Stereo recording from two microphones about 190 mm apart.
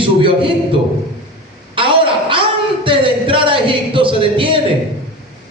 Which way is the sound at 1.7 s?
25° right (ahead or behind).